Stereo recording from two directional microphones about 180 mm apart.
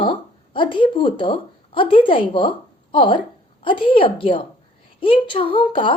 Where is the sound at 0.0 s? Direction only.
30° left (ahead or behind).